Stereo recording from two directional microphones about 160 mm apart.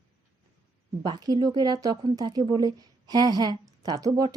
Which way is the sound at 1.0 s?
25° right (ahead or behind).